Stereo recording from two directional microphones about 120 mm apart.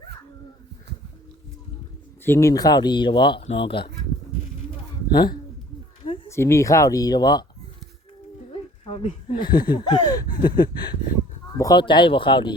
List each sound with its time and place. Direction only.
2.2 s speech: 20° left (ahead or behind); by 3.8 s 45° left (ahead or behind)
5.1 s speech: 35° left (ahead or behind)
6.2 s speech: 25° left (ahead or behind)
8.9 s speech: 45° left (ahead or behind)